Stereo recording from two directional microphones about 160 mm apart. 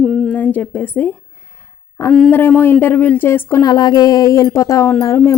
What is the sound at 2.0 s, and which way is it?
Speech, 20° left (ahead or behind).